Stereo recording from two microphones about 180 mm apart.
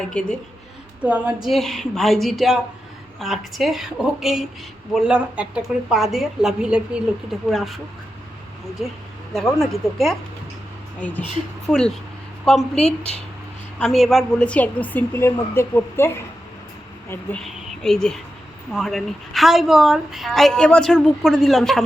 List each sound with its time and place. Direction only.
0.1 s a woman's voice: 5° left (ahead or behind)
1.0 s a woman's voice: 10° right (ahead or behind)
9.3 s a woman's voice: centre (ahead or behind)
12.8 s a woman's voice: 35° left (ahead or behind)
13.7 s a woman's voice: centre (ahead or behind)